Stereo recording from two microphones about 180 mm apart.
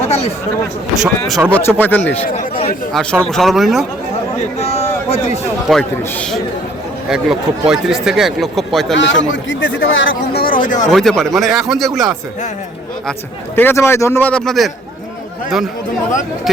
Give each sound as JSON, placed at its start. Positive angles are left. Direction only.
{"t": 0.1, "sound": "speech", "side_deg": 35}
{"t": 0.9, "sound": "speech", "side_deg": 0}
{"t": 1.5, "sound": "speech", "side_deg": 10}
{"t": 4.5, "sound": "a sound", "side_deg": 35}
{"t": 6.0, "sound": "speech", "side_deg": 5}
{"t": 9.0, "sound": "speech", "side_deg": 90}
{"t": 10.4, "sound": "speech", "side_deg": 50}
{"t": 10.9, "sound": "speech", "side_deg": 0}
{"t": 13.6, "sound": "speech", "side_deg": 10}